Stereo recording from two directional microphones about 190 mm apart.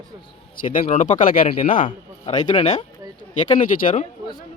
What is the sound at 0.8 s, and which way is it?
Speech, 35° left (ahead or behind).